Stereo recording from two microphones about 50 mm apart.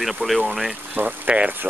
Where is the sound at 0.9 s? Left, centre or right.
Right.